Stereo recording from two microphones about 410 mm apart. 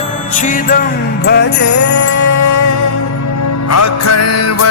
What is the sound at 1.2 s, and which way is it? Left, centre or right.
Jingle bell, left.